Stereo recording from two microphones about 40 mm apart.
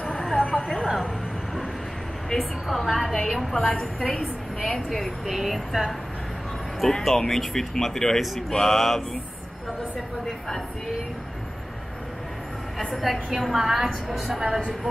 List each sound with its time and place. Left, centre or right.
0.1 s a sound: centre
0.8 s speech: centre
2.3 s a woman's voice: centre
3.8 s speech: centre
4.8 s a woman's voice: centre
7.0 s speech: centre
12.7 s a woman's voice: centre